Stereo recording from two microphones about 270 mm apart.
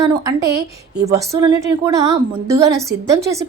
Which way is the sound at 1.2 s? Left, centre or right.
Centre.